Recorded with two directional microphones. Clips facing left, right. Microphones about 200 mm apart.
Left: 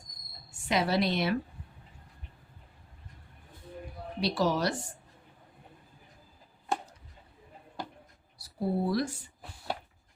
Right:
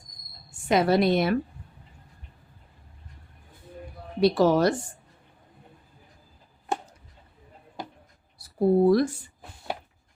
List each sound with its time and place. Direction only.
0.7 s a woman's voice: 50° right (ahead or behind)
4.2 s a woman's voice: 50° right (ahead or behind)
8.4 s speech: 55° right (ahead or behind)